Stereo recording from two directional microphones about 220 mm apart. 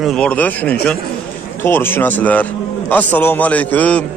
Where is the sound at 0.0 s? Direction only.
5° left (ahead or behind).